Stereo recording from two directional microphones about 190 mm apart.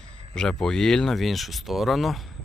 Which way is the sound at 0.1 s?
5° left (ahead or behind).